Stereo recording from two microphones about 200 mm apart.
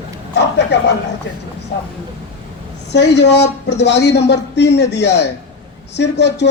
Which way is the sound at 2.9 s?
60° left (ahead or behind).